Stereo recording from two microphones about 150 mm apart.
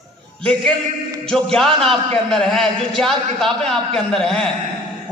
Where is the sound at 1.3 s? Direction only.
5° left (ahead or behind).